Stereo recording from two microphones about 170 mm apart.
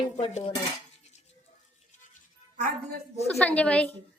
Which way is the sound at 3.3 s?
10° left (ahead or behind).